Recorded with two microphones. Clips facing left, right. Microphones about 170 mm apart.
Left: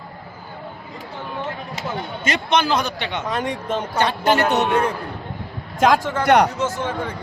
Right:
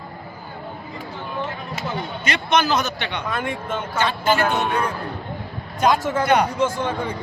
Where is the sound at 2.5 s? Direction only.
30° left (ahead or behind).